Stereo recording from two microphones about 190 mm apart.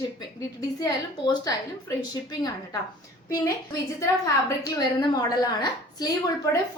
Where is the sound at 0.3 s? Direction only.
20° left (ahead or behind).